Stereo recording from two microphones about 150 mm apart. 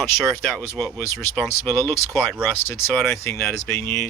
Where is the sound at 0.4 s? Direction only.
15° left (ahead or behind).